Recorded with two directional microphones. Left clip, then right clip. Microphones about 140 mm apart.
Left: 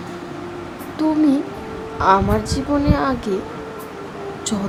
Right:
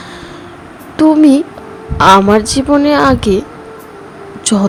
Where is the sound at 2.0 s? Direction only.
80° right.